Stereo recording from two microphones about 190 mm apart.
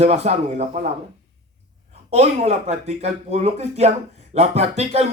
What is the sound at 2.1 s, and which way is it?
Speech, 35° right (ahead or behind).